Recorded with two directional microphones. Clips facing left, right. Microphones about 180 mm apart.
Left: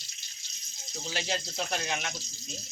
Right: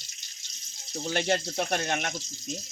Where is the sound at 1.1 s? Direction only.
55° right (ahead or behind).